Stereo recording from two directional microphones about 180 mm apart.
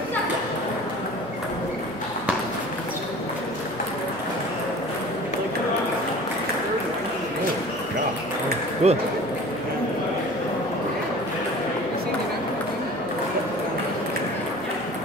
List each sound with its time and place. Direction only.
8.8 s speech: 35° right (ahead or behind)